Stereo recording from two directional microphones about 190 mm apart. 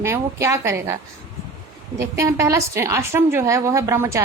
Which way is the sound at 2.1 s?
15° right (ahead or behind).